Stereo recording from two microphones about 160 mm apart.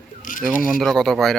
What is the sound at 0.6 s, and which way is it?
Speech, centre (ahead or behind).